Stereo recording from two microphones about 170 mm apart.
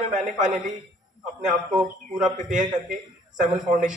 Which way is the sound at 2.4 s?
45° right (ahead or behind).